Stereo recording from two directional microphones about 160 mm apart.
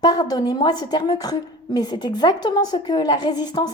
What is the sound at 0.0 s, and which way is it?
A woman's voice, 25° left (ahead or behind).